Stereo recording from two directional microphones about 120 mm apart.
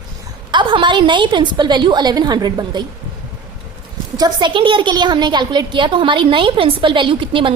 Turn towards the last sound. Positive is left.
turn(degrees=-45)  # may be behind; listen again after turning